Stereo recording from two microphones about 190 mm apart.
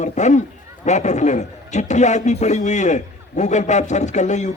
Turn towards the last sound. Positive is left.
turn(degrees=40)  # may be behind; listen again after turning